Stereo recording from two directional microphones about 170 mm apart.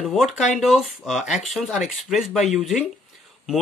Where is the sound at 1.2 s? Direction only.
45° left (ahead or behind).